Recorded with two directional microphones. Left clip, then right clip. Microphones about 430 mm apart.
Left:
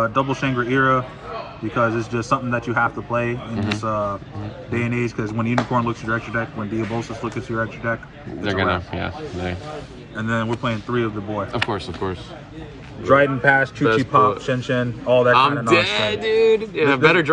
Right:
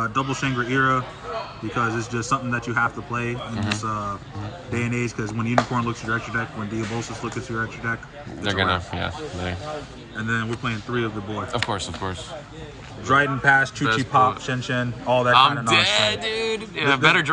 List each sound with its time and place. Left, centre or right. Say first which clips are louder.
0.0 s speech: left 4 dB; centre